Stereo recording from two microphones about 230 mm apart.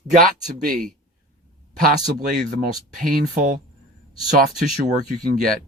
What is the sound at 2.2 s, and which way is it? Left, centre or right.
Speech, right.